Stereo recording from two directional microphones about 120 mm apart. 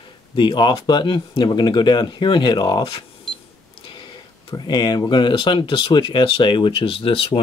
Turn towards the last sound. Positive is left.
turn(degrees=50)  # may be behind; listen again after turning